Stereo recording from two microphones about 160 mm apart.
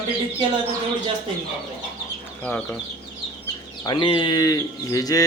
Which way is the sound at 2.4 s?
10° left (ahead or behind).